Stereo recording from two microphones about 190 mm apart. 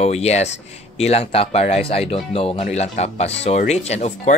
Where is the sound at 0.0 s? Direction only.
35° left (ahead or behind).